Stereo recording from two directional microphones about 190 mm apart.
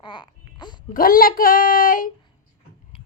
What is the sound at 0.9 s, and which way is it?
A child's voice, 50° left (ahead or behind).